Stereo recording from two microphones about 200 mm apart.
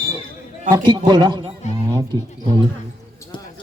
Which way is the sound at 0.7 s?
20° right (ahead or behind).